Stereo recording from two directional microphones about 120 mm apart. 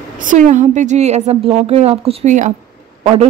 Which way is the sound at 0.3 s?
90° right.